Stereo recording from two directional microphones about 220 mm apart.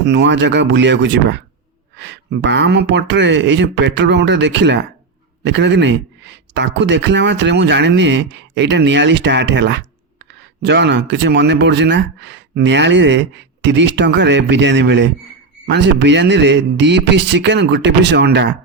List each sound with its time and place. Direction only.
0.0 s speech: 50° right (ahead or behind)